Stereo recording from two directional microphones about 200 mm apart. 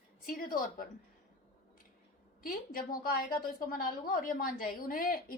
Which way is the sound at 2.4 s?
45° left (ahead or behind).